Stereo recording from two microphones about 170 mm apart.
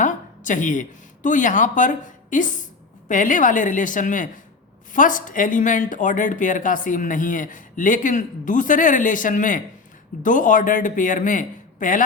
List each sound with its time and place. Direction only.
0.0 s speech: 50° left (ahead or behind)